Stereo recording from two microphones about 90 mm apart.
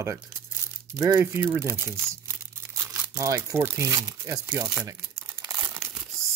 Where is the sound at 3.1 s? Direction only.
35° right (ahead or behind).